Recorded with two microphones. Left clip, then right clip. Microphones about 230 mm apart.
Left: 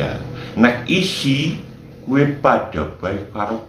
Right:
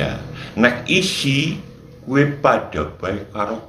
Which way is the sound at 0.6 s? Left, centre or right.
Right.